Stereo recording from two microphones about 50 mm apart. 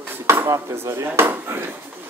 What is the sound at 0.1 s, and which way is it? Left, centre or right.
Dishes, right.